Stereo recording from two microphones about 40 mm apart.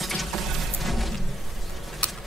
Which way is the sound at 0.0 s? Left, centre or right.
Centre.